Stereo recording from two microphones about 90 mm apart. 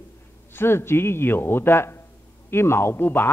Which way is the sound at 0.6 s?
25° left (ahead or behind).